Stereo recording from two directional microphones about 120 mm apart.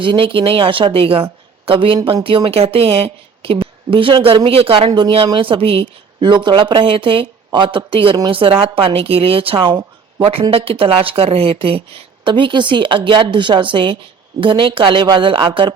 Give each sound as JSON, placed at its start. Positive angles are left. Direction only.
{"t": 0.0, "sound": "speech", "side_deg": -45}
{"t": 4.9, "sound": "speech", "side_deg": -35}